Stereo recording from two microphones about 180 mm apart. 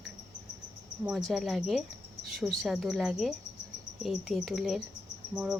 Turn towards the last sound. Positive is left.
turn(degrees=-5)  # may be behind; listen again after turning